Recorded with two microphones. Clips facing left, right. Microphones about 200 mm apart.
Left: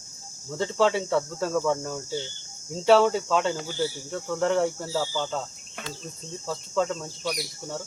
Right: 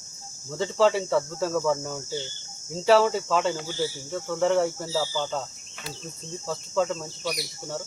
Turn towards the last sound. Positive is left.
turn(degrees=-5)  # may be behind; listen again after turning